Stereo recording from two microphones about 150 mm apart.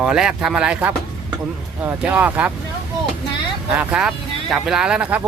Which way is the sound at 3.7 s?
5° right (ahead or behind).